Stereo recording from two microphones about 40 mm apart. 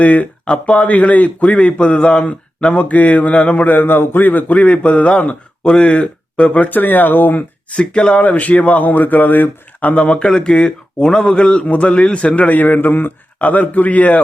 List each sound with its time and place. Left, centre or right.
0.0 s a man's voice: left
2.7 s a man's voice: left
3.7 s a man's voice: left
4.5 s a man's voice: left
6.7 s speech: left
7.7 s a man's voice: left
8.2 s a man's voice: left
8.9 s speech: left
9.9 s a man's voice: left
12.5 s a man's voice: left
13.4 s a man's voice: left